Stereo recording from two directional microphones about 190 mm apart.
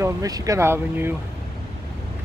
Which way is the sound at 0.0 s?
15° right (ahead or behind).